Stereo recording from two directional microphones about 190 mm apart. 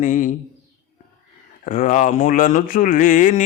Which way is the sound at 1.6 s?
45° left (ahead or behind).